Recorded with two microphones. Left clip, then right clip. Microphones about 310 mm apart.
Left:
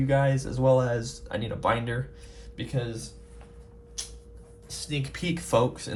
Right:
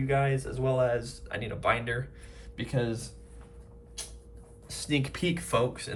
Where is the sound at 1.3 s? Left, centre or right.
Centre.